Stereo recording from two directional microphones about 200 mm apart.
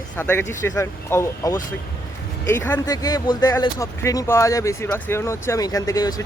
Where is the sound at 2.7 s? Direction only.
20° left (ahead or behind).